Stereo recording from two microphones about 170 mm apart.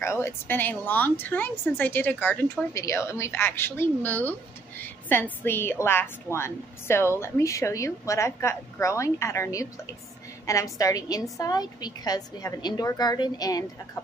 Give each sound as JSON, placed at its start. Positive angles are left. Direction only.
{"t": 0.0, "sound": "a woman's voice", "side_deg": 15}